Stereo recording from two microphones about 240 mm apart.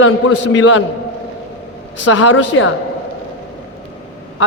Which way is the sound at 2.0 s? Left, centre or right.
Left.